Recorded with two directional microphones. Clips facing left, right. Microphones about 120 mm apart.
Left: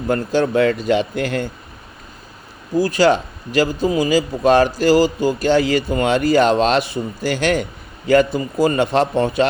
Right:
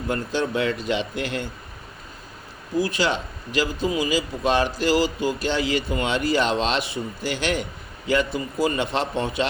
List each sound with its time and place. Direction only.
0.1 s a man's voice: 45° left (ahead or behind)
2.7 s a man's voice: 40° left (ahead or behind)